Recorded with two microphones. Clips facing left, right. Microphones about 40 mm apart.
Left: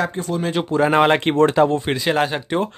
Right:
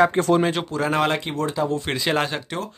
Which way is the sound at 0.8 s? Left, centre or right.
Left.